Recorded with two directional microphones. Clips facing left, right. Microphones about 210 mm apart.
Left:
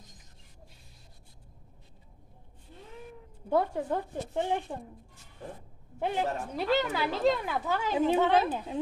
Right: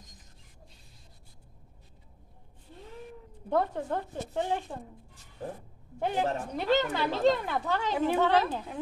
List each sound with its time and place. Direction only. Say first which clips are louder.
3.4 s speech: left 1 dB; 10° left (ahead or behind)
5.9 s a woman's voice: right 1 dB; centre (ahead or behind)
8.1 s speech: even; 20° left (ahead or behind)